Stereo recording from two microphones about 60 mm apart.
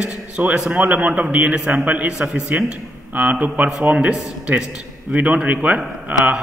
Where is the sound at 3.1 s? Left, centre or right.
Right.